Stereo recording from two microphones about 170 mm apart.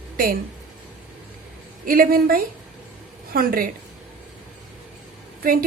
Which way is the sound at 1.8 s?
55° right (ahead or behind).